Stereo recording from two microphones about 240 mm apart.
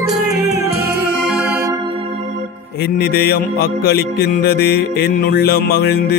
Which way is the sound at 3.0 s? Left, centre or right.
Left.